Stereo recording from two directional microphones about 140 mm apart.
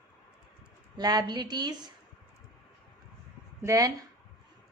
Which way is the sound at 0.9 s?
30° right (ahead or behind).